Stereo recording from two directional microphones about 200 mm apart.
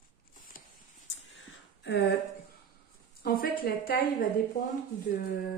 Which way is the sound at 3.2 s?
50° left (ahead or behind).